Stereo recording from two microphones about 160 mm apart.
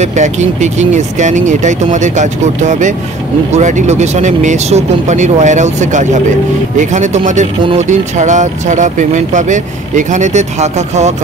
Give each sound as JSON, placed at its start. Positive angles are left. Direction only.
{"t": 0.0, "sound": "speech", "side_deg": -45}